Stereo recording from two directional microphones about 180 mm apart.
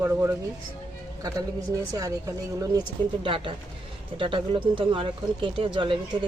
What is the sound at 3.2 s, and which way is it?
Speech, 30° right (ahead or behind).